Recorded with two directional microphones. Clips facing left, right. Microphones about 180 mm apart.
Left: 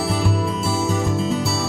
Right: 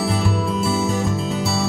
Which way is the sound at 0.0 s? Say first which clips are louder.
Even; centre (ahead or behind).